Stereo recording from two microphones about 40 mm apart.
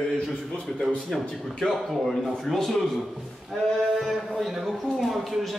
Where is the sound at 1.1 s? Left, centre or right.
Centre.